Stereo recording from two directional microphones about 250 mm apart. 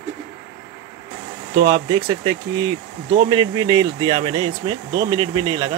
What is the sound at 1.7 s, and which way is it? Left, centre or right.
Speech, centre.